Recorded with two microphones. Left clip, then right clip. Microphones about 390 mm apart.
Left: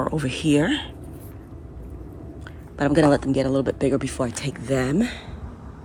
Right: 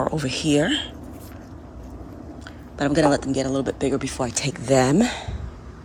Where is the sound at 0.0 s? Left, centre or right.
Centre.